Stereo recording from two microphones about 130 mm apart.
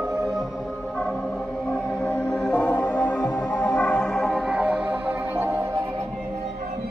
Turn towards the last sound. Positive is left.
turn(degrees=-15)  # may be behind; listen again after turning